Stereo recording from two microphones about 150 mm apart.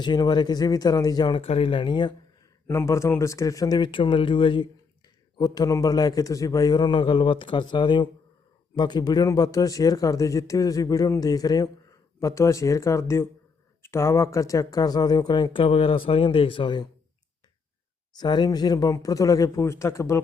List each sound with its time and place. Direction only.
0.0 s speech: 30° left (ahead or behind)
2.6 s speech: 20° left (ahead or behind)
18.2 s speech: 30° left (ahead or behind)